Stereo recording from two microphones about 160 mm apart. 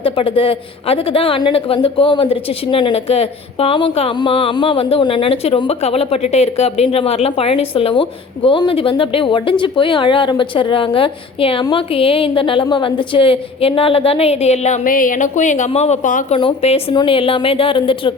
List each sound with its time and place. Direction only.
0.0 s a woman's voice: 35° left (ahead or behind)
16.4 s a woman's voice: 35° left (ahead or behind)